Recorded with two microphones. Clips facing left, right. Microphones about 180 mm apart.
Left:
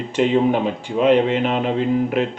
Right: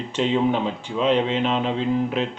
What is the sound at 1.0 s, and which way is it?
Speech, 55° left (ahead or behind).